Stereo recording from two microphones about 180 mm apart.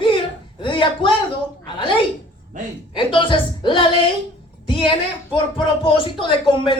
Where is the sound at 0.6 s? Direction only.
25° left (ahead or behind).